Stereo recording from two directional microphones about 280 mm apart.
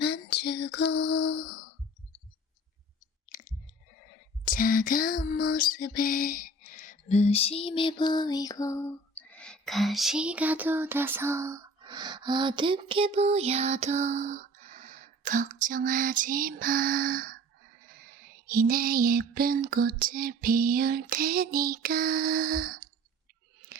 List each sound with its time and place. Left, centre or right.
0.0 s female singing: left
4.4 s a sound: left; by 17.2 s right
18.4 s female singing: right